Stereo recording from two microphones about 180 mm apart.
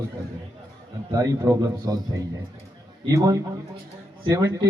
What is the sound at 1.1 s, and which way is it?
A man's voice, 15° right (ahead or behind).